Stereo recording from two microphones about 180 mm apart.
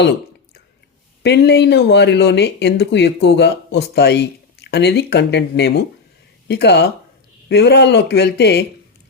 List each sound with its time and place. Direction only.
1.2 s speech: 70° left (ahead or behind)